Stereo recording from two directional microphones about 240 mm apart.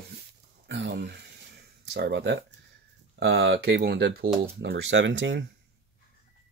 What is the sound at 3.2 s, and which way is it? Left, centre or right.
Speech, right.